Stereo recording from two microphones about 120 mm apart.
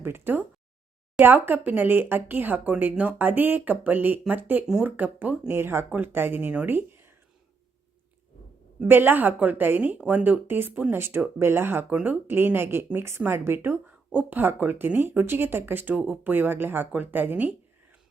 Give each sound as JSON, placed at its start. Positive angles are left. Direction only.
{"t": 0.0, "sound": "a woman's voice", "side_deg": -20}
{"t": 8.8, "sound": "a woman's voice", "side_deg": -15}